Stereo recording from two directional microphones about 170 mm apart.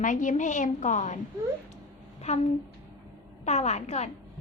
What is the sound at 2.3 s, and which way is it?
Speech, 40° left (ahead or behind).